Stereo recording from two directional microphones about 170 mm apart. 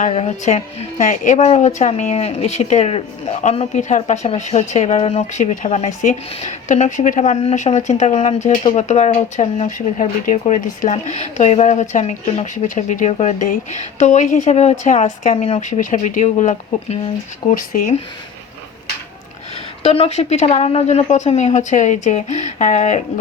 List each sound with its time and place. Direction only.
0.0 s a woman's voice: 40° left (ahead or behind)
19.8 s a woman's voice: 35° left (ahead or behind)